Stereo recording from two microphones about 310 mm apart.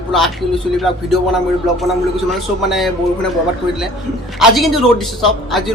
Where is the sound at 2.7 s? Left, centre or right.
Centre.